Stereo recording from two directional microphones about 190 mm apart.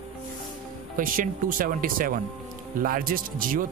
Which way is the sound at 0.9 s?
45° right (ahead or behind).